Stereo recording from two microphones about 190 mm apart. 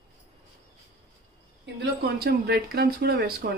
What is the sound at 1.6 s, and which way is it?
Speech, 60° right (ahead or behind).